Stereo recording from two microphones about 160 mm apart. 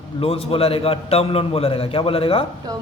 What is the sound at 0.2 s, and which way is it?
A man's voice, 35° left (ahead or behind).